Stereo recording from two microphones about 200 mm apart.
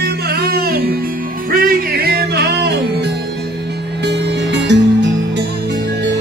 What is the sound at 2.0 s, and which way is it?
Music, 50° right (ahead or behind).